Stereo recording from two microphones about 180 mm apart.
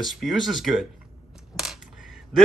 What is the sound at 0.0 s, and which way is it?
Speech, centre (ahead or behind).